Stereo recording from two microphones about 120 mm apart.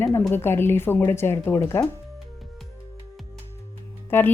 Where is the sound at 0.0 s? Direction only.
20° left (ahead or behind).